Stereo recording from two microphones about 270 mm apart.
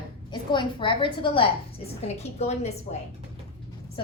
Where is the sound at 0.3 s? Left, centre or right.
Centre.